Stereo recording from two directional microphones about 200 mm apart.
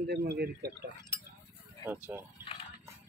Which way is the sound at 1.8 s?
10° right (ahead or behind).